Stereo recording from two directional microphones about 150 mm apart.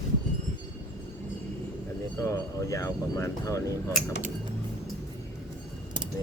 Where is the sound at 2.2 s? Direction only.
20° left (ahead or behind).